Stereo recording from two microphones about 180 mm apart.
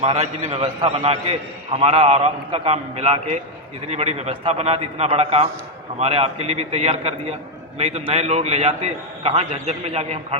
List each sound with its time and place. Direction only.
0.0 s a man's voice: 35° right (ahead or behind)